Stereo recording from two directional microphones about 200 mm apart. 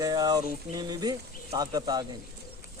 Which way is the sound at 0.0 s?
20° right (ahead or behind).